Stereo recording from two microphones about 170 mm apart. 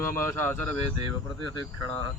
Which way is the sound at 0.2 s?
15° left (ahead or behind).